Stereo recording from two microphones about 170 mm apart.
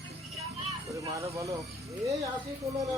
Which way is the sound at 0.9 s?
20° right (ahead or behind).